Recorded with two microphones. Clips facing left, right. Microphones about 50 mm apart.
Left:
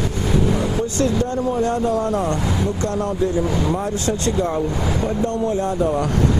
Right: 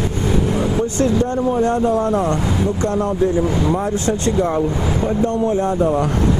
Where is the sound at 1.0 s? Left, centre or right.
Right.